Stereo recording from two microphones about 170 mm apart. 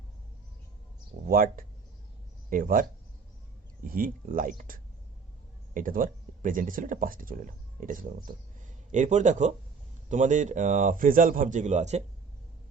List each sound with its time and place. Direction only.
1.3 s speech: 55° right (ahead or behind)
3.8 s speech: 55° right (ahead or behind)